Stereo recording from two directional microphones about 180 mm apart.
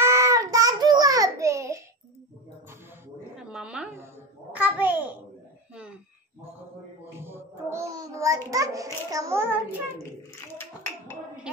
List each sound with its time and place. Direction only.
0.0 s child singing: 15° right (ahead or behind)
3.4 s a sound: 5° right (ahead or behind)
7.2 s child singing: 15° right (ahead or behind)